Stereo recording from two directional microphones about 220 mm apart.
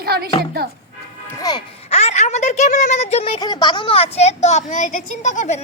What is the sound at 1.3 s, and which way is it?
Speech, 20° left (ahead or behind).